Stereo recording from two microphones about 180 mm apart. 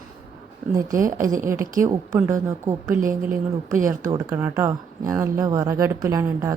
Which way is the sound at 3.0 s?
50° right (ahead or behind).